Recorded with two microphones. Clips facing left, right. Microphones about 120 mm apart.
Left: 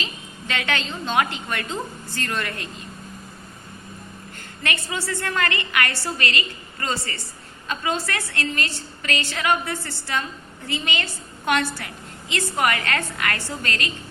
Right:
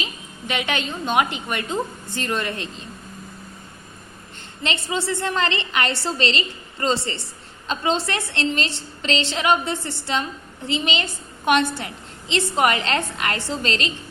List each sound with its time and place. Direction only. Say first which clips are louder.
0.0 s a woman's voice: right 1 dB; 15° right (ahead or behind)
4.9 s a woman's voice: right 4 dB; 25° right (ahead or behind)